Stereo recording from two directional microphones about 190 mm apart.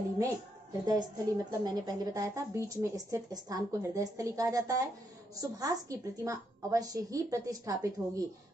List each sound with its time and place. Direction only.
0.8 s a woman's voice: 20° right (ahead or behind)